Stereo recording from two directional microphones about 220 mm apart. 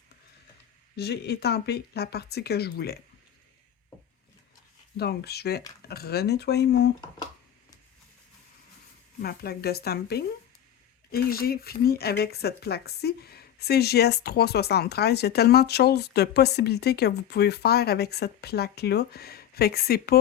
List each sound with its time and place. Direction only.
0.9 s speech: 50° left (ahead or behind)
4.9 s speech: 45° left (ahead or behind)
9.2 s speech: 45° left (ahead or behind)